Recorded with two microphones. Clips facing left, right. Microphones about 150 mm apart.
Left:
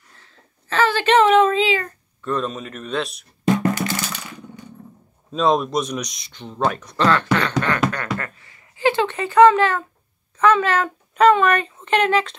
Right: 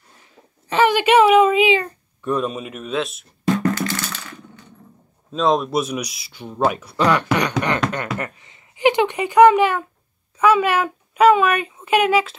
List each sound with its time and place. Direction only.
0.2 s speech: 15° right (ahead or behind)
3.5 s a sound: 20° left (ahead or behind)
5.3 s a woman's voice: centre (ahead or behind)